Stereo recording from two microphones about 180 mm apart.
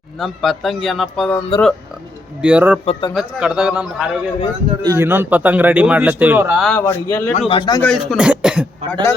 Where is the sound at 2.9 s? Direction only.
25° left (ahead or behind).